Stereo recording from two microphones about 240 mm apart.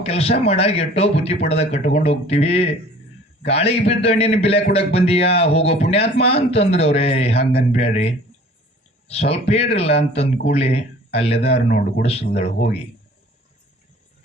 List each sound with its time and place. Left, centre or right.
0.0 s a man's voice: left
9.3 s a man's voice: left